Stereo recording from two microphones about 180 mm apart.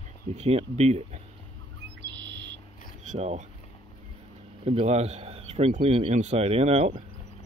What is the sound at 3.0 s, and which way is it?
Speech, 40° right (ahead or behind).